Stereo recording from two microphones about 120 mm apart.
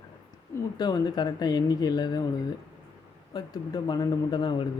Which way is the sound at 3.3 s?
35° left (ahead or behind).